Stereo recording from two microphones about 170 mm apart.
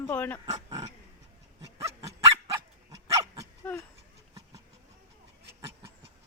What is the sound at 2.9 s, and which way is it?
Dog, 20° right (ahead or behind).